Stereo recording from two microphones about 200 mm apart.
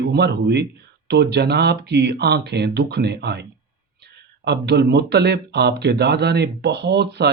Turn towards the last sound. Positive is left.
turn(degrees=-55)  # may be behind; listen again after turning